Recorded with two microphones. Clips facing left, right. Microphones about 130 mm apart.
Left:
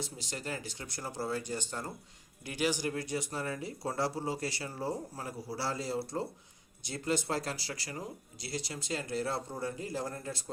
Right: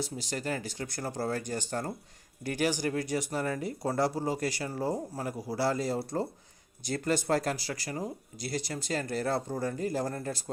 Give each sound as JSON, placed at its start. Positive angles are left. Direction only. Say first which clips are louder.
{"t": 0.0, "sound": "speech", "louder": "right 6 dB", "side_deg": -40}